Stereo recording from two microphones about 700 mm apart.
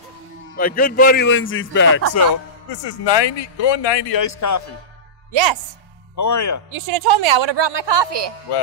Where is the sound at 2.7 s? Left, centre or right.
Left.